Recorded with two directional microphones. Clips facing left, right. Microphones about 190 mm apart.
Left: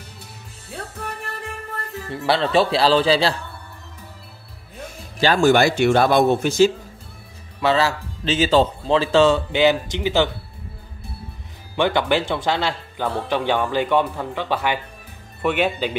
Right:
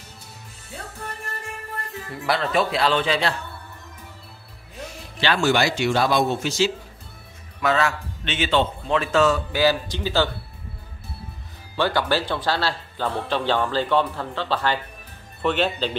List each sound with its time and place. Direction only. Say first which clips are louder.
2.0 s speech: left 4 dB; 30° left (ahead or behind)
5.2 s speech: left 5 dB; 45° left (ahead or behind)
7.6 s speech: left 3 dB; 30° left (ahead or behind)
11.7 s speech: left 3 dB; 20° left (ahead or behind)